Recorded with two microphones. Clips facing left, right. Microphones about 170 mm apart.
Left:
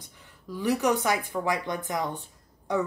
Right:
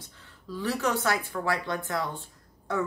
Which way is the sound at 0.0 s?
15° left (ahead or behind).